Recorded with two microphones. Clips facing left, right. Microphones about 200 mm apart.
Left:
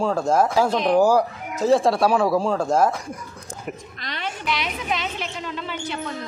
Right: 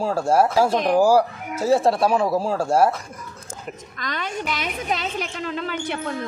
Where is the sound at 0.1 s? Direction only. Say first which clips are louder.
Right 4 dB; 10° right (ahead or behind).